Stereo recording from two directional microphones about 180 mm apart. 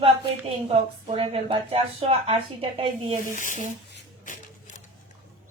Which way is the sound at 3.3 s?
45° left (ahead or behind).